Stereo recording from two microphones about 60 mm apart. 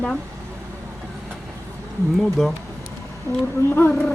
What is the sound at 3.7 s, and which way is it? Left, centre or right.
Speech, left.